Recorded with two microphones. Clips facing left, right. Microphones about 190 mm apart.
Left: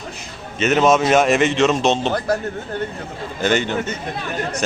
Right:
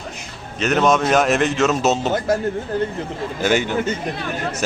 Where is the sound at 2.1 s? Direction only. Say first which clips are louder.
Right 1 dB; 25° right (ahead or behind).